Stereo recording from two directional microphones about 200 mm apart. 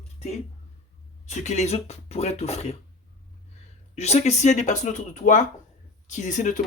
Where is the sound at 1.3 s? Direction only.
35° left (ahead or behind).